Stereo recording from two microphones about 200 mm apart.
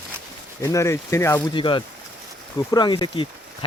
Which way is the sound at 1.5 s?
25° left (ahead or behind).